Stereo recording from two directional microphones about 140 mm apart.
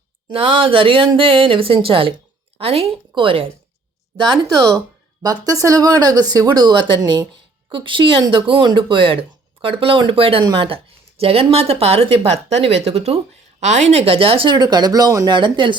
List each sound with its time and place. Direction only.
0.3 s speech: 40° right (ahead or behind)
5.2 s speech: 25° right (ahead or behind)